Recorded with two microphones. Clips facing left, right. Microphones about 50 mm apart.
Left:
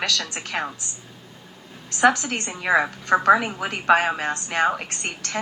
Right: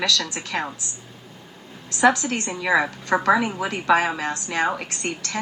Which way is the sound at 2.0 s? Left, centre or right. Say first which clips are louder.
Even; left.